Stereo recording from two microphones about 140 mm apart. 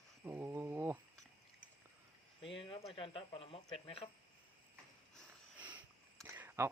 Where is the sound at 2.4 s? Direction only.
40° left (ahead or behind).